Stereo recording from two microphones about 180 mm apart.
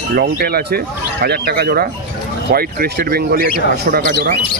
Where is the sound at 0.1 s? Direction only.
60° right (ahead or behind).